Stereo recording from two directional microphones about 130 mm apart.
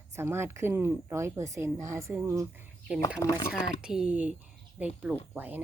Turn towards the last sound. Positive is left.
turn(degrees=-15)  # may be behind; listen again after turning